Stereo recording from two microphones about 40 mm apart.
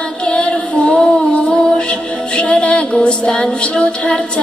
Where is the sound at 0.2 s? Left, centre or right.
Left.